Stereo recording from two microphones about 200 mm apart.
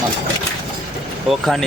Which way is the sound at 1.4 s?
Centre (ahead or behind).